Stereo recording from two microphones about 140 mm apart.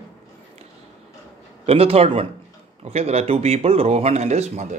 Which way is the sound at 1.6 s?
45° right (ahead or behind).